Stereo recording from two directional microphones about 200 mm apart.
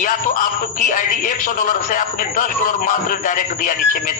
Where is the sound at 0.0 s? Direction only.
40° left (ahead or behind).